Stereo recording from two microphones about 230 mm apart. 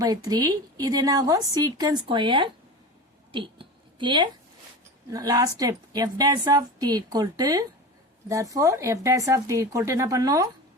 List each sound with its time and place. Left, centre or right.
0.0 s a woman's voice: centre
3.3 s a sound: right
5.1 s a woman's voice: centre